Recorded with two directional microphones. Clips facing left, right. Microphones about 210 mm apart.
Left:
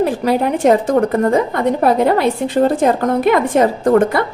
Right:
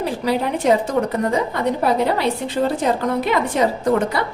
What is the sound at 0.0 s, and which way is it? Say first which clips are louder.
A woman's voice: left 5 dB; 50° left (ahead or behind).